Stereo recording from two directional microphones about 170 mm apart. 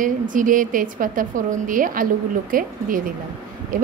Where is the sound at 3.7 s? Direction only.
55° right (ahead or behind).